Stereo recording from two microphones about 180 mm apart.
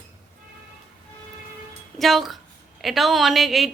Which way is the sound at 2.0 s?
Centre (ahead or behind).